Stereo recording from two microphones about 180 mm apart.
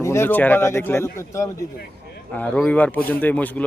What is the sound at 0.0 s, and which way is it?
Speech, 15° left (ahead or behind).